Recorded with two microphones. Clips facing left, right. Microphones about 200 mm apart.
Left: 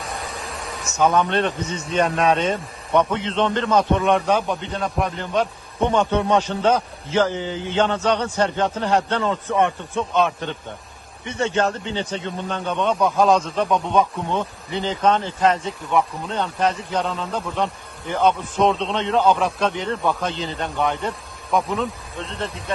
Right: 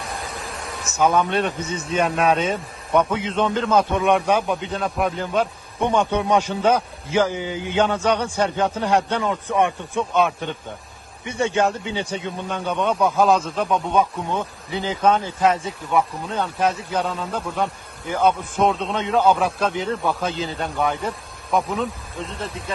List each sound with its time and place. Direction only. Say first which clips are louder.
0.0 s a man's voice: even; centre (ahead or behind)